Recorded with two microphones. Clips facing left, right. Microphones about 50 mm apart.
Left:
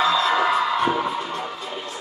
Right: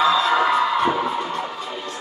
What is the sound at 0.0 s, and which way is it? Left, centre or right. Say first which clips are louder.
Music: right 2 dB; centre.